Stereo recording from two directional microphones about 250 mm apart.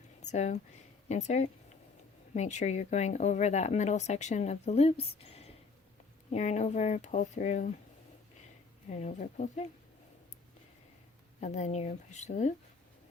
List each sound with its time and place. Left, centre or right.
0.2 s speech: left
8.9 s speech: left
11.3 s speech: left